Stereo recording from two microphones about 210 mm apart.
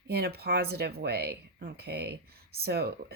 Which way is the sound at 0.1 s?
50° right (ahead or behind).